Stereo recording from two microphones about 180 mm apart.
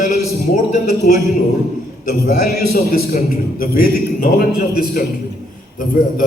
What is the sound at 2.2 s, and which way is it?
A man's voice, 55° left (ahead or behind).